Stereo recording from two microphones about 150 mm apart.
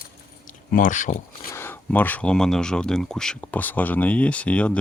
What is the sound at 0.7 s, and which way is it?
Speech, 60° left (ahead or behind).